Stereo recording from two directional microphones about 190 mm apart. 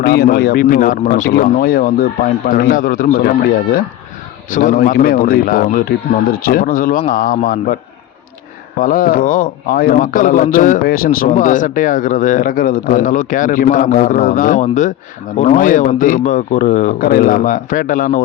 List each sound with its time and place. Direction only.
0.0 s a man's voice: 55° left (ahead or behind)
8.8 s a man's voice: 50° left (ahead or behind)